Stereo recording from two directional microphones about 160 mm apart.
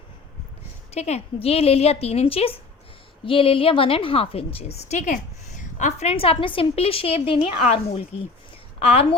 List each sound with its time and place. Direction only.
0.9 s a woman's voice: 45° left (ahead or behind)